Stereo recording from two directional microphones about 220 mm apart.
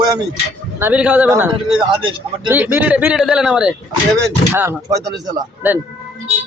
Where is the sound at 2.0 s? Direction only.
25° right (ahead or behind).